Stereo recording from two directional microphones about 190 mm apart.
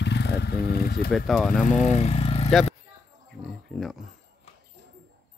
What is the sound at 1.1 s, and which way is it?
Speech, 5° left (ahead or behind).